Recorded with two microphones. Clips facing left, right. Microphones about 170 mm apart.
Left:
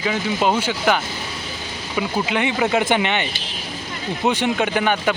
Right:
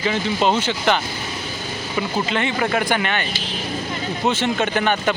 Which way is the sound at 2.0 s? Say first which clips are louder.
Left 1 dB; 10° left (ahead or behind).